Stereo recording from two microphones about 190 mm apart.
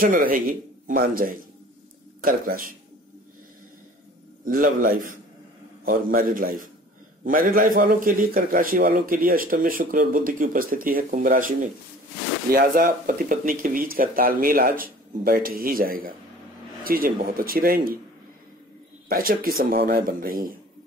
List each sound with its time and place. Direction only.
0.0 s a man's voice: 45° right (ahead or behind)
4.5 s a man's voice: 45° right (ahead or behind)
19.0 s a man's voice: 50° right (ahead or behind)